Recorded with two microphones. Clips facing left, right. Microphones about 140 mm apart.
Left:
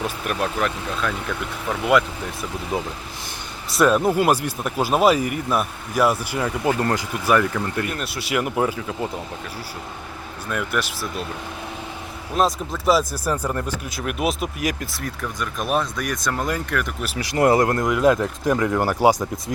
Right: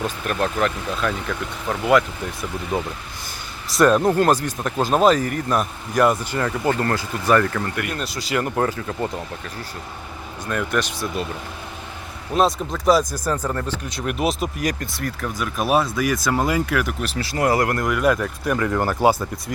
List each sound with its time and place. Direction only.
0.0 s speech: 5° left (ahead or behind)
10.5 s speech: 5° left (ahead or behind)
12.3 s speech: centre (ahead or behind)
17.0 s speech: 10° left (ahead or behind)